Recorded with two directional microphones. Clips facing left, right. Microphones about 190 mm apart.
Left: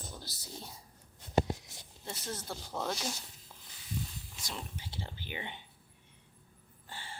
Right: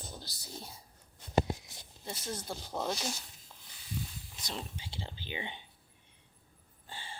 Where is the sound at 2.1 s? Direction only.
10° right (ahead or behind).